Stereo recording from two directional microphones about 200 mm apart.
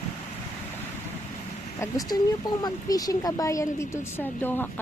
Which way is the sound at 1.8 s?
20° left (ahead or behind).